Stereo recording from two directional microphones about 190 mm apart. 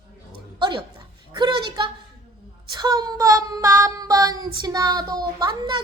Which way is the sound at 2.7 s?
20° right (ahead or behind).